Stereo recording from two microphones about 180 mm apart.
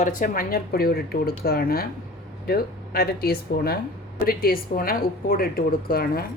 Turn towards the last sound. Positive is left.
turn(degrees=55)  # may be behind; listen again after turning